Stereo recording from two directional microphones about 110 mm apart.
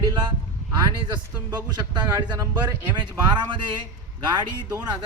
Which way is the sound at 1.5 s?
40° right (ahead or behind).